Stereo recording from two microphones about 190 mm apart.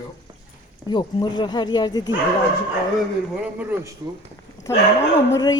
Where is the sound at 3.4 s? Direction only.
5° right (ahead or behind).